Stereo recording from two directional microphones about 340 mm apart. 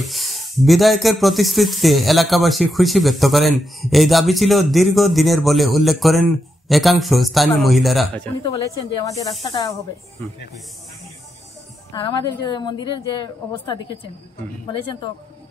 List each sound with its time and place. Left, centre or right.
0.0 s a woman's voice: centre
11.9 s a woman's voice: centre